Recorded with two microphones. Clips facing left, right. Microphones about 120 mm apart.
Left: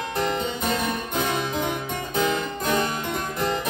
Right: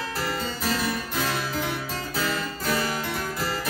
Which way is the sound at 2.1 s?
20° left (ahead or behind).